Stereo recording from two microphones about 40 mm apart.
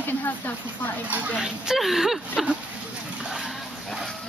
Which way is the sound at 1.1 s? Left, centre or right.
Right.